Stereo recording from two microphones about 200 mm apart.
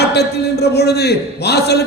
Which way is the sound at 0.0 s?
55° left (ahead or behind).